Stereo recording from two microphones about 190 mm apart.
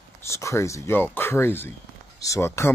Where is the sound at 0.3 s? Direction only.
15° left (ahead or behind).